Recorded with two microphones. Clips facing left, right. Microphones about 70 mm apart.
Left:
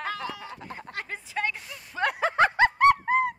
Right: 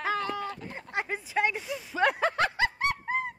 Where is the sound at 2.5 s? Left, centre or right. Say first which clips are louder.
Left 9 dB; left.